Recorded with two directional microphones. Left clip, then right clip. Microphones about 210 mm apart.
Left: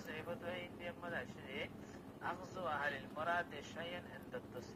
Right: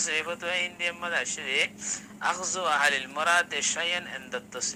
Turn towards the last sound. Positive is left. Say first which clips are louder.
# right 16 dB
turn(degrees=-50)  # may be behind; listen again after turning